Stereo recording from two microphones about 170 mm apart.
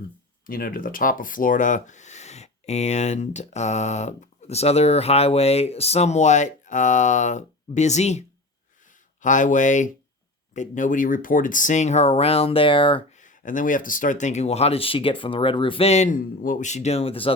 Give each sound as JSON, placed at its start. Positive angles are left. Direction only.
{"t": 0.4, "sound": "speech", "side_deg": 55}
{"t": 9.2, "sound": "speech", "side_deg": 50}
{"t": 13.1, "sound": "speech", "side_deg": 50}